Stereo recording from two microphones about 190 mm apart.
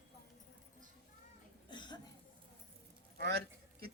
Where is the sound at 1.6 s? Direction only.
25° left (ahead or behind).